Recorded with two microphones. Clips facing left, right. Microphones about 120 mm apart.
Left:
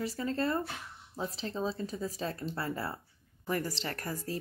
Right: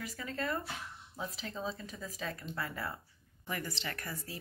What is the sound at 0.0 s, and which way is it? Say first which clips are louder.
Speech: left 7 dB; 30° left (ahead or behind).